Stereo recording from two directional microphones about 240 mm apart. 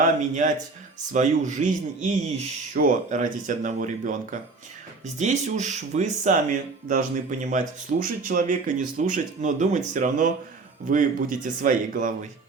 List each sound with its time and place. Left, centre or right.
0.0 s speech: right